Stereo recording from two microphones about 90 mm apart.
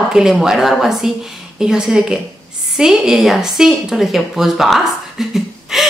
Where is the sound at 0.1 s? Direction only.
5° right (ahead or behind).